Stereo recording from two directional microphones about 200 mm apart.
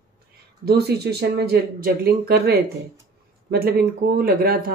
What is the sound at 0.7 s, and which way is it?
Speech, 55° right (ahead or behind).